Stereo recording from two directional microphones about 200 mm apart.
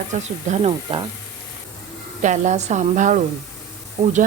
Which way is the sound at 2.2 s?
35° right (ahead or behind).